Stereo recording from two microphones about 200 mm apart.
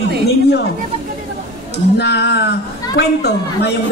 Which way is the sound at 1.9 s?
55° left (ahead or behind).